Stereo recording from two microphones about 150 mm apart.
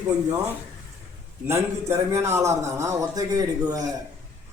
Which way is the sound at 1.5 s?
15° right (ahead or behind).